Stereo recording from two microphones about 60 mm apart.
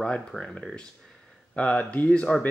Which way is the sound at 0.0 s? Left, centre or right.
Centre.